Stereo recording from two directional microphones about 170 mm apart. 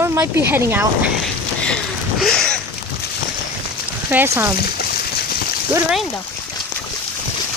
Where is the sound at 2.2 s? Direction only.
5° left (ahead or behind).